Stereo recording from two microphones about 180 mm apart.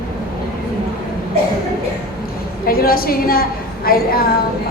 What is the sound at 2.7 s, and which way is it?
A woman's voice, 55° left (ahead or behind).